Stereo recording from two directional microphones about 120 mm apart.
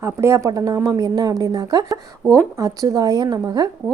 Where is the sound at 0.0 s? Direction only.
25° right (ahead or behind).